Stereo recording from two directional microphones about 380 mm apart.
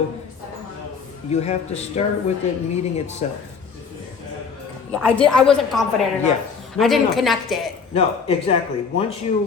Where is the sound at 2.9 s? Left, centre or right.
Centre.